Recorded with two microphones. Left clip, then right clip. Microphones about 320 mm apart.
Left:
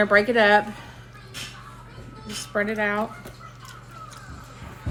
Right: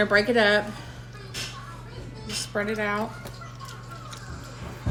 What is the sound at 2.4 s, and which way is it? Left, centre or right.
Speech, left.